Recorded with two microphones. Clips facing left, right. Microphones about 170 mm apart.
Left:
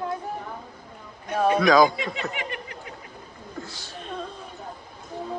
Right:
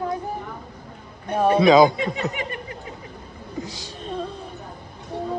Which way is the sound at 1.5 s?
25° right (ahead or behind).